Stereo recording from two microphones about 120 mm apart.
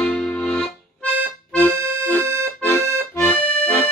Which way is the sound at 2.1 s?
20° left (ahead or behind).